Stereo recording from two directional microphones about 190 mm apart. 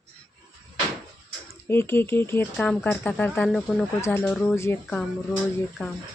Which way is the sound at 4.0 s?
10° left (ahead or behind).